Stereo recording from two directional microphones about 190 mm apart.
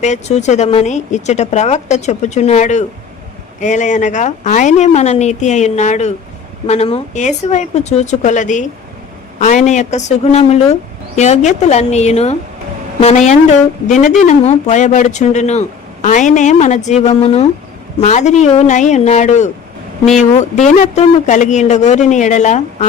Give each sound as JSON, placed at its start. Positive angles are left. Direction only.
{"t": 0.0, "sound": "speech", "side_deg": 40}